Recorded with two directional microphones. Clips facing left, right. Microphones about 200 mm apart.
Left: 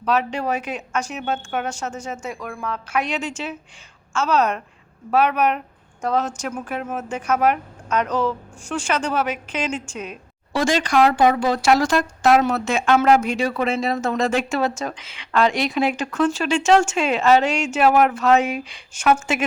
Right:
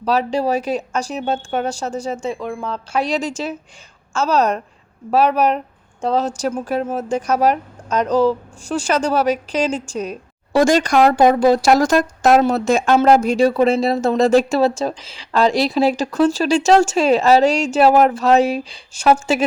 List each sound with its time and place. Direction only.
0.0 s speech: 35° right (ahead or behind)